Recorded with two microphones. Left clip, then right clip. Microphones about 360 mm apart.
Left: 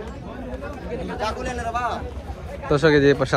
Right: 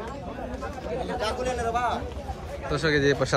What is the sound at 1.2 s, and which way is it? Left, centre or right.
Speech, centre.